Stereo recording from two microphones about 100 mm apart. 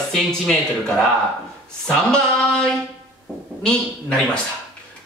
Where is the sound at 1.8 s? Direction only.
10° left (ahead or behind).